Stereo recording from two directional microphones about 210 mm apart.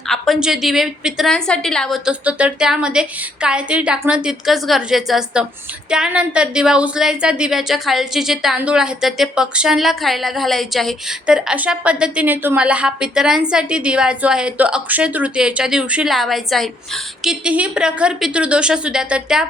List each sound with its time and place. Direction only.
0.1 s a woman's voice: centre (ahead or behind)